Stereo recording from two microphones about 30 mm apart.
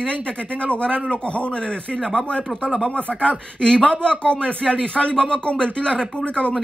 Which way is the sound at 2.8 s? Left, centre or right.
Left.